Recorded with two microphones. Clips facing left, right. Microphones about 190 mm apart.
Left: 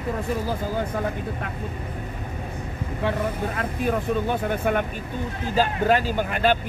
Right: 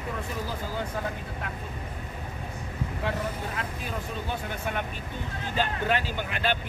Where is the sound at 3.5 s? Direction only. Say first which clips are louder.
Left 9 dB; 55° left (ahead or behind).